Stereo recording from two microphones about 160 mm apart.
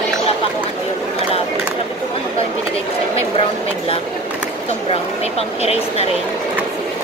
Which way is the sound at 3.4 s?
35° left (ahead or behind).